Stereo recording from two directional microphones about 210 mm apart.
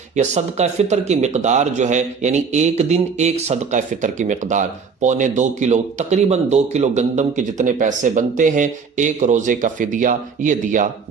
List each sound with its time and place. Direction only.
0.2 s speech: 30° right (ahead or behind)